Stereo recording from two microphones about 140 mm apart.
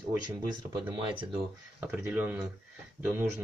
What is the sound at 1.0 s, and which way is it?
Speech, 35° right (ahead or behind).